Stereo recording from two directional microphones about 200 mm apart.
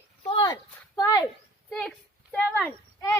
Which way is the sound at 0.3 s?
20° left (ahead or behind).